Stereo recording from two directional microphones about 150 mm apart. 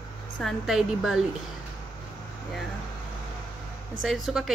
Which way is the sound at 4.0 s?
Centre (ahead or behind).